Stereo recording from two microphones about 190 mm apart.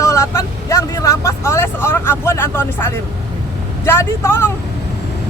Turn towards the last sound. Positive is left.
turn(degrees=15)  # may be behind; listen again after turning